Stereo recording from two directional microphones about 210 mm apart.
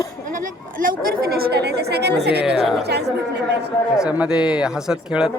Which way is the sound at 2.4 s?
Centre (ahead or behind).